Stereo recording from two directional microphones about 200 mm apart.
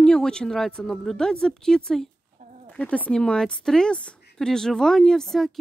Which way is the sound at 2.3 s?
35° right (ahead or behind).